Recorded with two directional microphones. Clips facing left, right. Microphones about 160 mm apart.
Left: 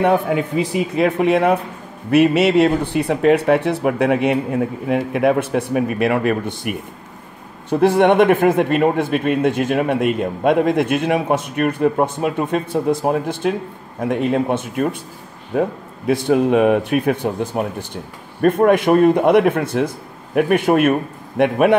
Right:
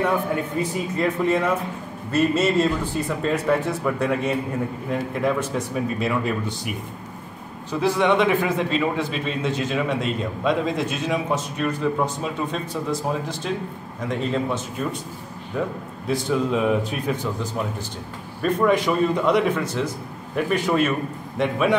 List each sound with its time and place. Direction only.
0.0 s speech: 75° left (ahead or behind)
7.7 s speech: 55° left (ahead or behind)
15.5 s speech: 70° left (ahead or behind)